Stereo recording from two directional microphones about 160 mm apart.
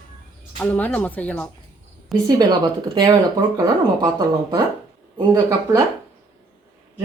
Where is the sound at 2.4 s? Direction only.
25° right (ahead or behind).